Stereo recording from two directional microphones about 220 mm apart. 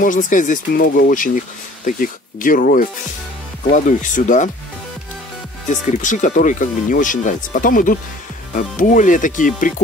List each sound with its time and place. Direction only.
0.0 s speech: 35° left (ahead or behind)
5.7 s speech: 35° left (ahead or behind)